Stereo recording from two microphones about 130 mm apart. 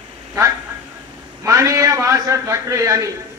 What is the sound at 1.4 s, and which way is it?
A man's voice, 25° right (ahead or behind).